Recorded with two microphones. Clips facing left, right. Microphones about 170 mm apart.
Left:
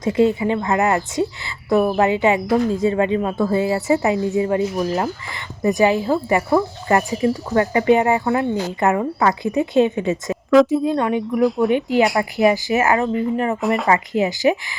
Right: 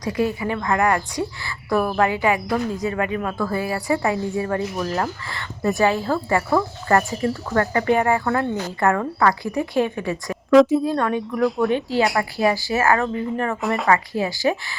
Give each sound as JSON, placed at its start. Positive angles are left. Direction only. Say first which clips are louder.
{"t": 0.0, "sound": "a woman's voice", "louder": "left 6 dB", "side_deg": 25}
{"t": 10.5, "sound": "speech", "louder": "even", "side_deg": 0}
{"t": 10.8, "sound": "a woman's voice", "louder": "left 3 dB", "side_deg": 20}
{"t": 11.3, "sound": "speech", "louder": "left 3 dB", "side_deg": 0}
{"t": 11.7, "sound": "a woman's voice", "louder": "left 3 dB", "side_deg": 20}
{"t": 13.6, "sound": "speech", "louder": "left 3 dB", "side_deg": 0}
{"t": 13.8, "sound": "a woman's voice", "louder": "left 2 dB", "side_deg": 20}